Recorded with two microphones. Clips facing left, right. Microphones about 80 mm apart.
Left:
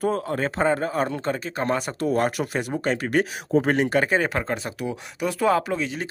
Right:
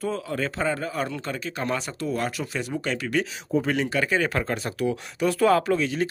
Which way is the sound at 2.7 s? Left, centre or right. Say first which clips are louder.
Left 3 dB; left.